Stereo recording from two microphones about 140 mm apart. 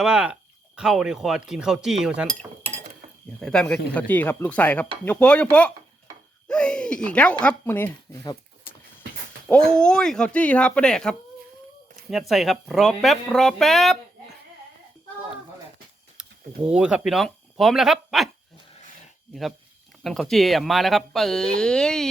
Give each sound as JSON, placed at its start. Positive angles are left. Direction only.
{"t": 0.0, "sound": "speech", "side_deg": -5}
{"t": 6.5, "sound": "a sound", "side_deg": 5}
{"t": 7.4, "sound": "speech", "side_deg": 15}
{"t": 8.2, "sound": "a sound", "side_deg": 25}
{"t": 9.5, "sound": "speech", "side_deg": 5}
{"t": 12.3, "sound": "speech", "side_deg": 0}
{"t": 16.2, "sound": "a sound", "side_deg": -10}
{"t": 16.6, "sound": "speech", "side_deg": -5}
{"t": 19.3, "sound": "speech", "side_deg": 0}